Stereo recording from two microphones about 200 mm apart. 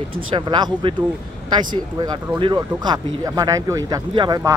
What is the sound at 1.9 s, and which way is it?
Speech, 20° right (ahead or behind).